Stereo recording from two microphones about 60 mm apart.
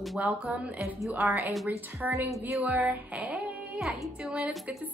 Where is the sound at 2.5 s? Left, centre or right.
Right.